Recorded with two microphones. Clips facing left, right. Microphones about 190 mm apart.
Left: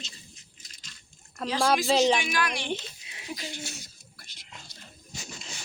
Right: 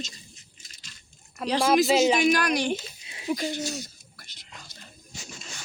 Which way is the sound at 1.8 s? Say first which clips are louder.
Right 2 dB; 5° right (ahead or behind).